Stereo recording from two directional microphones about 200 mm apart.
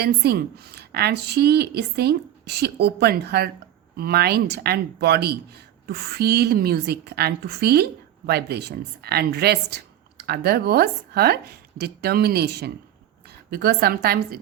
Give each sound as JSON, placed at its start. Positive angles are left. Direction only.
{"t": 0.0, "sound": "a woman's voice", "side_deg": -55}